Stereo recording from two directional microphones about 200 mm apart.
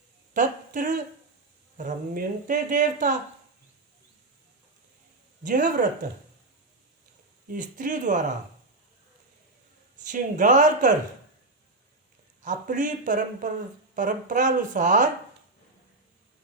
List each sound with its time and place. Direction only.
0.3 s a woman's voice: 40° right (ahead or behind)
5.4 s speech: 40° right (ahead or behind)
7.4 s speech: 40° right (ahead or behind)
10.0 s speech: 40° right (ahead or behind)
12.4 s speech: 40° right (ahead or behind)